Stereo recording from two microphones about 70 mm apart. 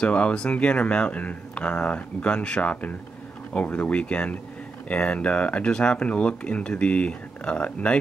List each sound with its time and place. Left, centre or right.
0.0 s speech: centre